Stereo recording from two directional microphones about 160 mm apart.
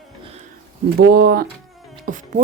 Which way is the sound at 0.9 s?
75° right (ahead or behind).